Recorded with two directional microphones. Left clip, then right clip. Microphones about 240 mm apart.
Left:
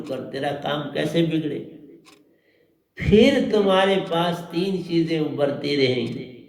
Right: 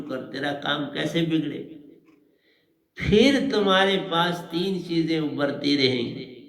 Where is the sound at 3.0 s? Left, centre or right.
Right.